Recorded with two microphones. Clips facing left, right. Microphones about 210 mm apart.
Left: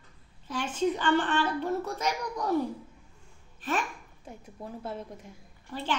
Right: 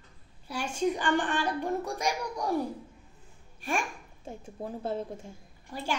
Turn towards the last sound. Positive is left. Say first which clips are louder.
# left 2 dB
turn(degrees=-15)  # may be behind; listen again after turning